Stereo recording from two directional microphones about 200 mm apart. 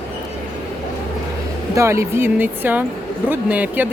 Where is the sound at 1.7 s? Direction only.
15° right (ahead or behind).